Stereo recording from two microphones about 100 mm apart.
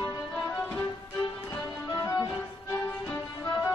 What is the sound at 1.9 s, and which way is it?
Music, 30° left (ahead or behind).